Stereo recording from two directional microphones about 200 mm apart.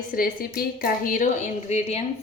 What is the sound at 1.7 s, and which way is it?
Speech, 35° left (ahead or behind).